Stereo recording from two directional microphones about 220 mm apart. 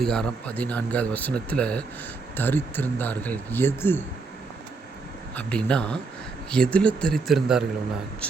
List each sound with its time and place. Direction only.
0.0 s speech: 5° left (ahead or behind)
5.3 s speech: 5° left (ahead or behind)